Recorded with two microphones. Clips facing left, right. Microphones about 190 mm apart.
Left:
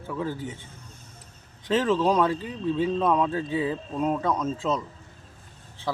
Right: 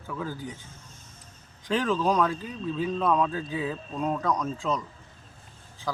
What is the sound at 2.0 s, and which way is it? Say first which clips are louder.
Speech: left 2 dB; 30° left (ahead or behind).